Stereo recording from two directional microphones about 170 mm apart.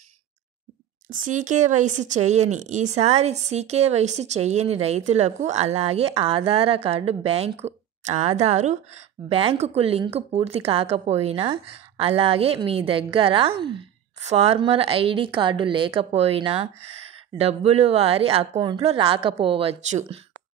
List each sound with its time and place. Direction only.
1.0 s speech: 50° right (ahead or behind)